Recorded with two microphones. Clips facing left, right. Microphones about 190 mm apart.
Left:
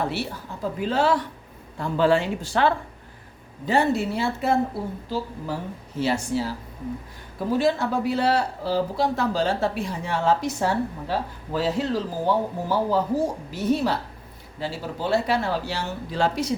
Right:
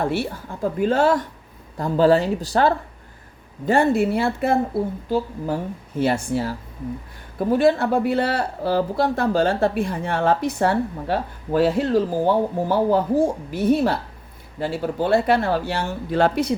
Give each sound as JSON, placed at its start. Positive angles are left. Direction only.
{"t": 0.0, "sound": "speech", "side_deg": -50}
{"t": 3.7, "sound": "speech", "side_deg": -50}